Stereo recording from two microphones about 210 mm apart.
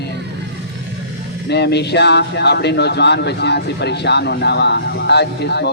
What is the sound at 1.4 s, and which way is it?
Speech, 55° left (ahead or behind).